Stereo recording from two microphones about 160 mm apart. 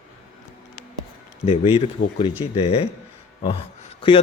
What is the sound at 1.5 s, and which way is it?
A man's voice, 35° left (ahead or behind).